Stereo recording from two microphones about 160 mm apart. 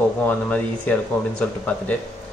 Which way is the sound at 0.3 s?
10° left (ahead or behind).